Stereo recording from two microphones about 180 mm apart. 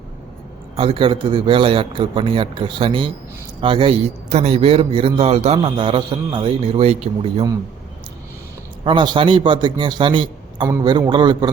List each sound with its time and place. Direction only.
0.8 s a man's voice: 30° right (ahead or behind)
8.8 s a man's voice: 25° right (ahead or behind)